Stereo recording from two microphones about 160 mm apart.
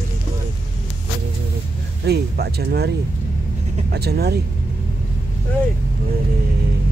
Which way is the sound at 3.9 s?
90° right.